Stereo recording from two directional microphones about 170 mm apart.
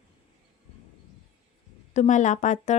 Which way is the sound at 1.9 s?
45° left (ahead or behind).